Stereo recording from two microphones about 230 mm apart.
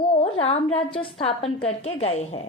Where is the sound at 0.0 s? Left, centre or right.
Left.